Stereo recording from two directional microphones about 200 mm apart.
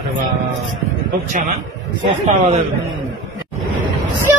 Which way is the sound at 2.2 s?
35° right (ahead or behind).